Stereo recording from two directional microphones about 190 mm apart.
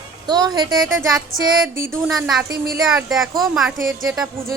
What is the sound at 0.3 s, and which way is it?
Speech, 20° right (ahead or behind).